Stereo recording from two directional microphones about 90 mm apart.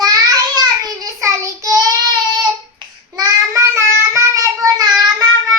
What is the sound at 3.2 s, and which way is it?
Child singing, 35° right (ahead or behind).